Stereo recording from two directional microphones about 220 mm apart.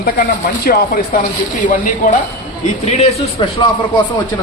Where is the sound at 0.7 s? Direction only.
40° left (ahead or behind).